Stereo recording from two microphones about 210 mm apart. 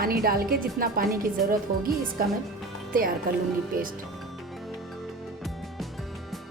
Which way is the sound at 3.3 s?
45° right (ahead or behind).